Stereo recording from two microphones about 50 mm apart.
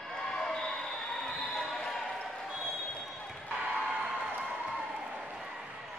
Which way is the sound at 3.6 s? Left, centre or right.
Right.